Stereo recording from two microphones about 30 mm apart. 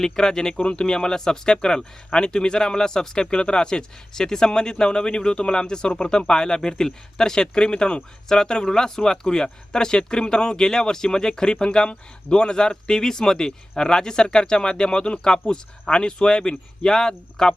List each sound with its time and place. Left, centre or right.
0.0 s speech: centre